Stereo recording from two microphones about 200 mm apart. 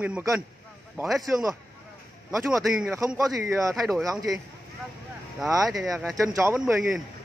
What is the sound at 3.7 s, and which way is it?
Speech, centre (ahead or behind).